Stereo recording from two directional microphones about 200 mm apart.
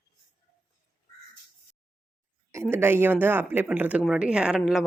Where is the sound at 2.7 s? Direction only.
10° right (ahead or behind).